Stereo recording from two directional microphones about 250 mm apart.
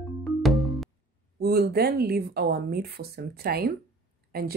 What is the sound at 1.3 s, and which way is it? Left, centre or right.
Speech, right.